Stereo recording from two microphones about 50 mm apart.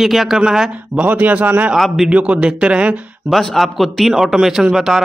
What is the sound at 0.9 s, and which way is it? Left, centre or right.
Speech, right.